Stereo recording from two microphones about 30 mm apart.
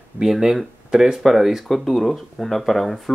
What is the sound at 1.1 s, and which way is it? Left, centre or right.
Speech, centre.